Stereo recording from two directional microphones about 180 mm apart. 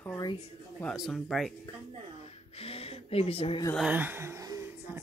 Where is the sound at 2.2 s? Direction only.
35° left (ahead or behind).